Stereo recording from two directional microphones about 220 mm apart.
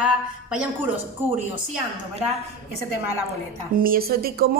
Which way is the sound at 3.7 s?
40° right (ahead or behind).